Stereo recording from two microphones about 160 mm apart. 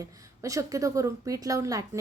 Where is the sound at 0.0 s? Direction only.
20° right (ahead or behind).